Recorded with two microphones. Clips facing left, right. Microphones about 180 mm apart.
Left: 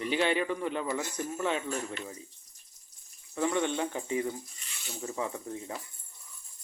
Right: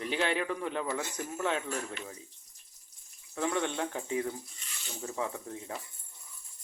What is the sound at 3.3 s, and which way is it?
Speech, centre (ahead or behind).